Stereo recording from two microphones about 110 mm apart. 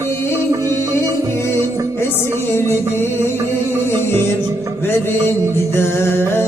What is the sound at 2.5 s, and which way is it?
Music, 20° left (ahead or behind).